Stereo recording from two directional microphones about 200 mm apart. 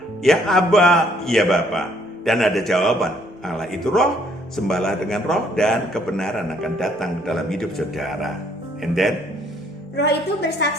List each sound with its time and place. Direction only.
0.2 s a man's voice: centre (ahead or behind)
10.6 s a woman's voice: 55° left (ahead or behind)